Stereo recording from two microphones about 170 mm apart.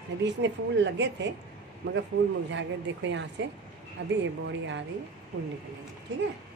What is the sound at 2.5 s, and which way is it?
A woman's voice, 90° right.